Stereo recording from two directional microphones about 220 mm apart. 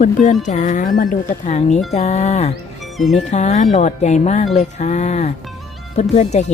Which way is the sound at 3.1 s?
30° left (ahead or behind).